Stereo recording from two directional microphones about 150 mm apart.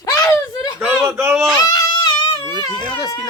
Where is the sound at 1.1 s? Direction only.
15° right (ahead or behind).